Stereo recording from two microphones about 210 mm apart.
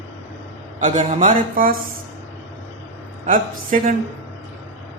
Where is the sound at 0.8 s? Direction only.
35° right (ahead or behind).